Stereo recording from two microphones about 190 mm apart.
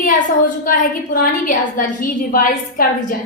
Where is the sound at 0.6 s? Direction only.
45° left (ahead or behind).